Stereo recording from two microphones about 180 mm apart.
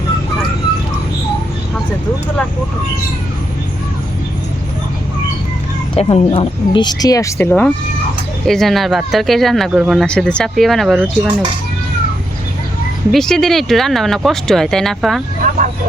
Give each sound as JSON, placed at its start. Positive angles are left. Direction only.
{"t": 5.9, "sound": "speech", "side_deg": 30}
{"t": 13.1, "sound": "speech", "side_deg": 0}